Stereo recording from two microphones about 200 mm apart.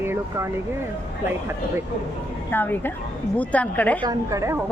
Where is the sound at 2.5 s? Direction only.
10° left (ahead or behind).